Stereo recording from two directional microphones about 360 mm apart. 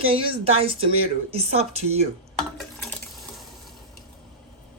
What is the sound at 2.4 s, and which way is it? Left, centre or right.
Stir, centre.